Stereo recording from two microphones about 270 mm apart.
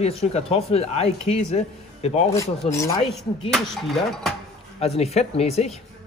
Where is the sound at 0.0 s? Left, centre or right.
Left.